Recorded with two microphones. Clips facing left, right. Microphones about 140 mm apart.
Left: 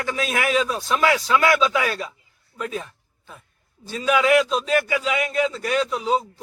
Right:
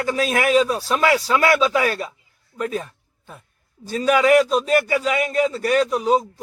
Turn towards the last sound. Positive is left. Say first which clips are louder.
# right 4 dB
turn(degrees=-40)  # may be behind; listen again after turning